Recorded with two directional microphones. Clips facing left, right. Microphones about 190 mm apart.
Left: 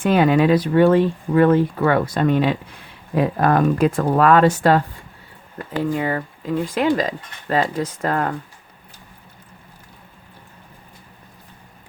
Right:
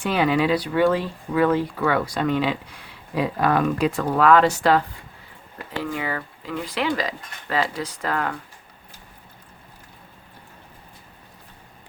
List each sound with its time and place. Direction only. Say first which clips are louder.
0.0 s speech: left 5 dB; 50° left (ahead or behind)
5.8 s speech: left 6 dB; 45° left (ahead or behind)